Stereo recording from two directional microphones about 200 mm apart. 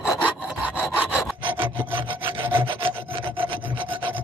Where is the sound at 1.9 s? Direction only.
25° right (ahead or behind).